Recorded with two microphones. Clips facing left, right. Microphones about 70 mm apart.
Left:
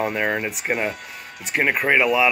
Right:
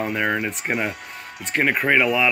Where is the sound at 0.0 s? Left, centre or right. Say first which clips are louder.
Even; centre.